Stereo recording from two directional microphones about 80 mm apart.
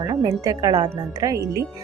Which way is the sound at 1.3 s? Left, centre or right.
Right.